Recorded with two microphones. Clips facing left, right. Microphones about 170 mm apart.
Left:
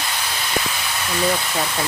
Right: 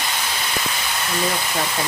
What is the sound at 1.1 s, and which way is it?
Speech, centre (ahead or behind).